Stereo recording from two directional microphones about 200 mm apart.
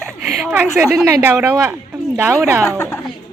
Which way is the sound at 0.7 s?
5° right (ahead or behind).